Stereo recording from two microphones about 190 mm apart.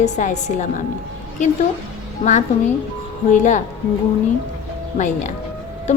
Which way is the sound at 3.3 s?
40° left (ahead or behind).